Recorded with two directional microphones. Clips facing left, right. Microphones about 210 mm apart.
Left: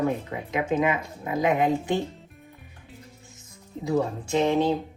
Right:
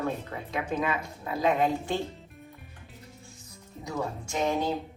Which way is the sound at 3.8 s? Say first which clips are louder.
Left 8 dB; 20° left (ahead or behind).